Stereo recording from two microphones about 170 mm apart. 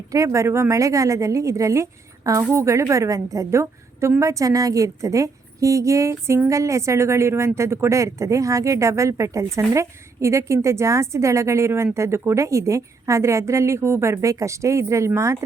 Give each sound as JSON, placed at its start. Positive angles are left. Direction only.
{"t": 0.1, "sound": "a woman's voice", "side_deg": -15}